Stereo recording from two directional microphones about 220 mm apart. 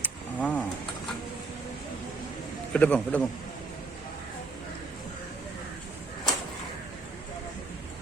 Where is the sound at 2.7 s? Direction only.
5° left (ahead or behind).